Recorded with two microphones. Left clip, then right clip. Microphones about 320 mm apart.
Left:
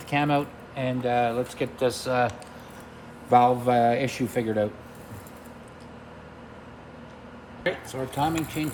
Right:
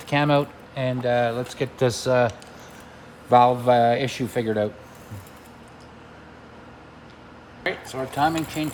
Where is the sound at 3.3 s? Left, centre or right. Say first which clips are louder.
Right 3 dB; right.